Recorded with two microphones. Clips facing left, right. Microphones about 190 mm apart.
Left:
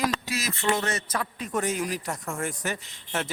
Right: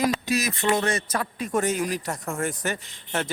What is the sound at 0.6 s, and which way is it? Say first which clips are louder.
Speech: left 1 dB; 35° right (ahead or behind).